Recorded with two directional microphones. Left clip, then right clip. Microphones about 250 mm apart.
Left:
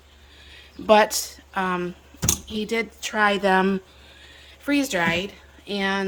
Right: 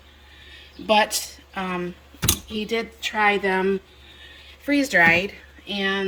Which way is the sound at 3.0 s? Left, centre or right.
Left.